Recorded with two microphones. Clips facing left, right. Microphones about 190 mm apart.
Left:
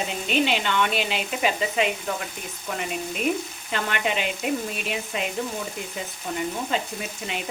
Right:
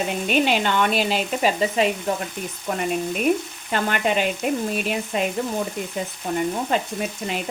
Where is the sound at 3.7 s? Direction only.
45° right (ahead or behind).